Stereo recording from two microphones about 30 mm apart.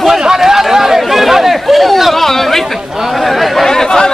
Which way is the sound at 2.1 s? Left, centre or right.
Centre.